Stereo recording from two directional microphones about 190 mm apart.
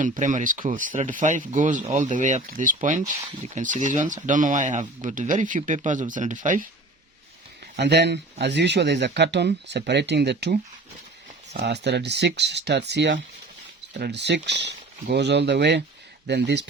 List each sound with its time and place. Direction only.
0.0 s speech: 40° right (ahead or behind)
7.8 s speech: 65° right (ahead or behind)